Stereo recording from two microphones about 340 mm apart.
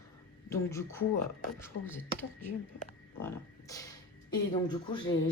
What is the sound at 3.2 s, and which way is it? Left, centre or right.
Speech, centre.